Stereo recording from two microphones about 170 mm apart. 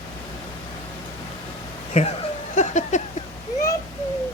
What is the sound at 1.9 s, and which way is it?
Speech, 40° left (ahead or behind).